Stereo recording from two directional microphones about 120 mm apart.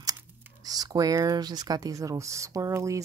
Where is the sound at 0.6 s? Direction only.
30° right (ahead or behind).